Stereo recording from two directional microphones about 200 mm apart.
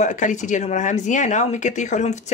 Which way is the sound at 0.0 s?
40° left (ahead or behind).